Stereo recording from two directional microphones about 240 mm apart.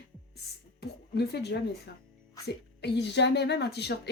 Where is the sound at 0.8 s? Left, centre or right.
Left.